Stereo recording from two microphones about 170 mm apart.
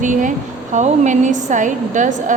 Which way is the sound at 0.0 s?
50° right (ahead or behind).